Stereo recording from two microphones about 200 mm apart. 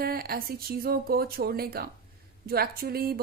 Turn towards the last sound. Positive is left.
turn(degrees=-50)  # may be behind; listen again after turning